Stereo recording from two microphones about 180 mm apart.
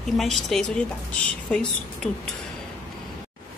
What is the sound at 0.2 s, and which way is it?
A woman's voice, centre (ahead or behind).